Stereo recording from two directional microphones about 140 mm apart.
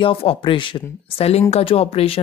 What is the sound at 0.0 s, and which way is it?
Speech, 40° left (ahead or behind).